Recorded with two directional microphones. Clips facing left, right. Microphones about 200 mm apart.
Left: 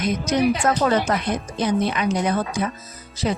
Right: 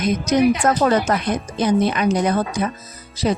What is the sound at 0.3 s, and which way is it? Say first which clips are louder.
A woman's voice: right 3 dB; 40° right (ahead or behind).